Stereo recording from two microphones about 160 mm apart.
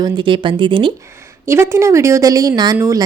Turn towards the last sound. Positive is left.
turn(degrees=-20)  # may be behind; listen again after turning